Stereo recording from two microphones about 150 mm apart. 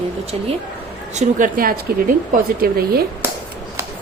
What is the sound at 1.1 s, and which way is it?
Speech, 55° right (ahead or behind).